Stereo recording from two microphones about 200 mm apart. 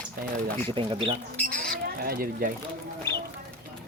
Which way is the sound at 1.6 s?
50° right (ahead or behind).